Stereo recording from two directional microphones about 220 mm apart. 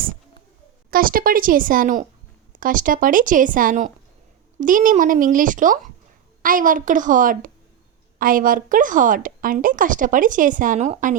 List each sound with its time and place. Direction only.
0.9 s a woman's voice: 40° right (ahead or behind)